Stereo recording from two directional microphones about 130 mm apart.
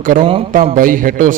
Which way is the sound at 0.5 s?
90° right.